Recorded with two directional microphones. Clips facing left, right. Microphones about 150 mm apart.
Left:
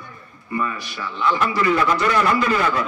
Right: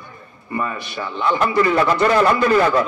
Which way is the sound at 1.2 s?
30° right (ahead or behind).